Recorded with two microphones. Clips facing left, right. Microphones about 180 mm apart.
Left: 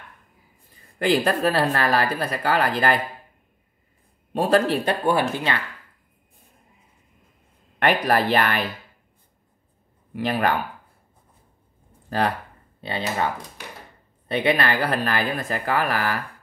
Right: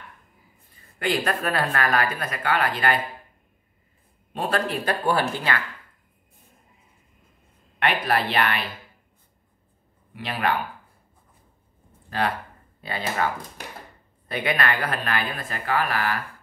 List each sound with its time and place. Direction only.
0.9 s a woman's voice: 35° left (ahead or behind)
4.3 s a woman's voice: 40° left (ahead or behind)
4.8 s speech: 20° left (ahead or behind)
7.8 s speech: 45° left (ahead or behind)
10.1 s speech: 45° left (ahead or behind)
12.1 s speech: 40° left (ahead or behind)
12.8 s a woman's voice: 25° left (ahead or behind); by 16.2 s 40° left (ahead or behind)